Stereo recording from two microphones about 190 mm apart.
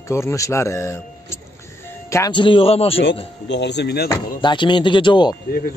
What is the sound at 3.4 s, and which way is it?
Speech, 65° left (ahead or behind).